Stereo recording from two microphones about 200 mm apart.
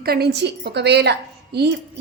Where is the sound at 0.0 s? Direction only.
50° right (ahead or behind).